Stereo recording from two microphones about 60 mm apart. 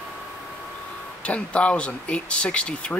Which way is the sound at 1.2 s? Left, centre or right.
Left.